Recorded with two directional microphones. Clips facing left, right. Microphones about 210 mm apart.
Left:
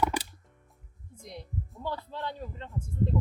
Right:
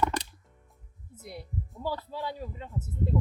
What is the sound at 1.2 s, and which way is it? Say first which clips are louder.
Speech: right 1 dB; 5° right (ahead or behind).